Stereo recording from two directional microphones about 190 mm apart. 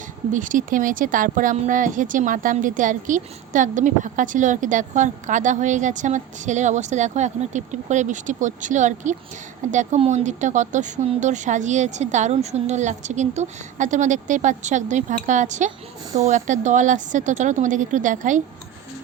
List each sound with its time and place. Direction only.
0.3 s a woman's voice: 45° right (ahead or behind)